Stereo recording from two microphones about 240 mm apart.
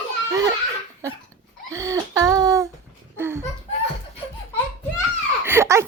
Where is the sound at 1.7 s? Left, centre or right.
Centre.